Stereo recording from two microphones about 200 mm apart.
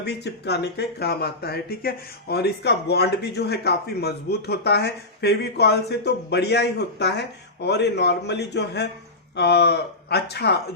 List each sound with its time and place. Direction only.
0.0 s speech: 55° left (ahead or behind)